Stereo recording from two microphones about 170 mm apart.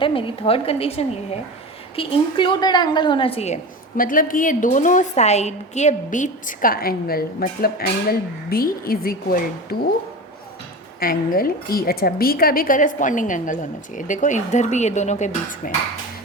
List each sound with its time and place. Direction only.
0.0 s a woman's voice: 30° left (ahead or behind)
3.9 s a woman's voice: 55° left (ahead or behind)
11.0 s a woman's voice: 60° left (ahead or behind)